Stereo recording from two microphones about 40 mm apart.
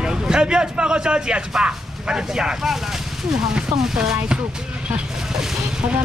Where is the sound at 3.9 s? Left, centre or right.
Centre.